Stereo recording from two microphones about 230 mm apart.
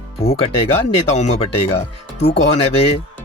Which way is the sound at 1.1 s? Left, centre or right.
Left.